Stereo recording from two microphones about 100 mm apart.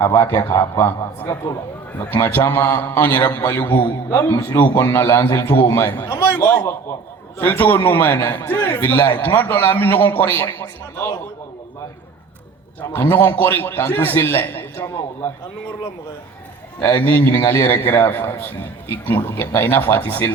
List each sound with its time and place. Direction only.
0.0 s a man's voice: 20° left (ahead or behind)
4.1 s a man's voice: 30° left (ahead or behind)
4.4 s a man's voice: 20° left (ahead or behind)
12.9 s a man's voice: 20° left (ahead or behind)
16.8 s a man's voice: 20° left (ahead or behind)